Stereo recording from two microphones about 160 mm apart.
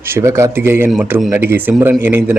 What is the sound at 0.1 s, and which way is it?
A man's voice, 15° right (ahead or behind).